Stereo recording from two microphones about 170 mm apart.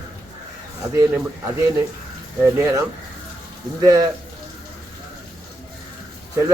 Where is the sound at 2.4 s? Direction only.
15° right (ahead or behind).